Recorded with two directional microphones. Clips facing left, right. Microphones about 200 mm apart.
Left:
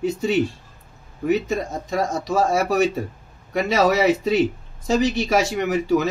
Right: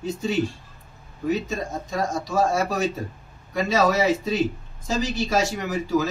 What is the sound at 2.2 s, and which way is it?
A man's voice, 65° left (ahead or behind).